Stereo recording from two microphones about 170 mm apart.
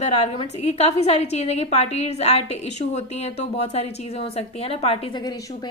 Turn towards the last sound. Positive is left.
turn(degrees=35)  # may be behind; listen again after turning